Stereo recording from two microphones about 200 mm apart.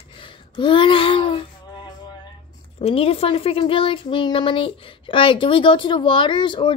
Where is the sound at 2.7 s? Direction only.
30° left (ahead or behind).